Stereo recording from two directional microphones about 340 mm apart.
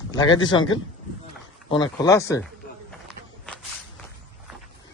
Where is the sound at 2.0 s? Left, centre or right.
Centre.